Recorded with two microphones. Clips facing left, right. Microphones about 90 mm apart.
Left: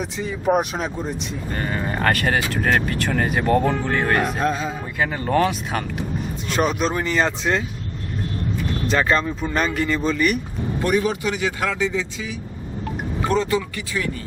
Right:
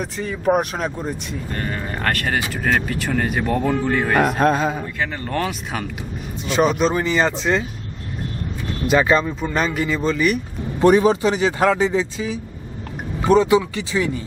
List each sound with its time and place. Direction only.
0.0 s speech: centre (ahead or behind)
1.5 s speech: 5° left (ahead or behind)
4.2 s music: 55° right (ahead or behind)
4.9 s speech: 10° left (ahead or behind)
8.9 s speech: 5° right (ahead or behind)
10.8 s speech: 30° right (ahead or behind)
13.2 s speech: 15° right (ahead or behind)